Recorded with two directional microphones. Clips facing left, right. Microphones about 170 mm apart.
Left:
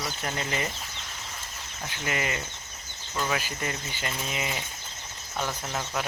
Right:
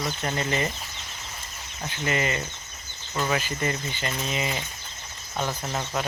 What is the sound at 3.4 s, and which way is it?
Speech, 10° left (ahead or behind).